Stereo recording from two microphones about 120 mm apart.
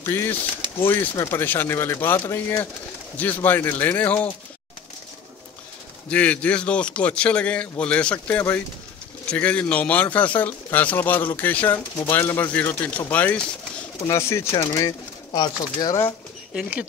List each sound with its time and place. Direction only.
0.0 s speech: 20° left (ahead or behind)
6.0 s speech: 10° left (ahead or behind); by 16.0 s 35° left (ahead or behind)